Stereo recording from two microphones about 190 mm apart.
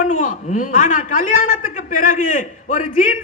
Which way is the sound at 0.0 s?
45° left (ahead or behind).